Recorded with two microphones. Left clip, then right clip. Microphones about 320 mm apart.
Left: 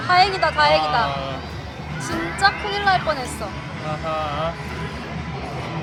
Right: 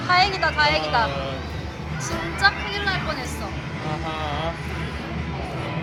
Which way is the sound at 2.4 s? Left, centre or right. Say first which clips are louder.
Left 2 dB; centre.